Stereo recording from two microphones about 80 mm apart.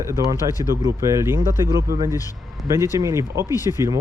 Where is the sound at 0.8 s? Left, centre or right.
Right.